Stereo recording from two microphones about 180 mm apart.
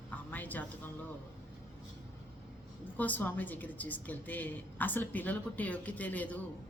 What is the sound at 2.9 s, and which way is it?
Speech, 10° left (ahead or behind).